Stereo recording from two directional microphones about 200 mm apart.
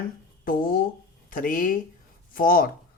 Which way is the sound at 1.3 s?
45° left (ahead or behind).